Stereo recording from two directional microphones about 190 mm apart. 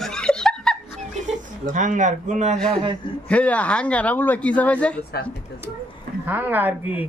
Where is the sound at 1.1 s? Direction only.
40° right (ahead or behind).